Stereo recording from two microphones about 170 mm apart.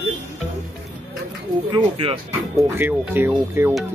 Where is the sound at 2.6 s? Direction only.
10° right (ahead or behind).